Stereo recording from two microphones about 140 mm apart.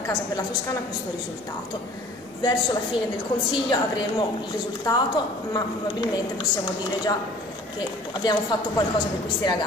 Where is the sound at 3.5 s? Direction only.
35° left (ahead or behind).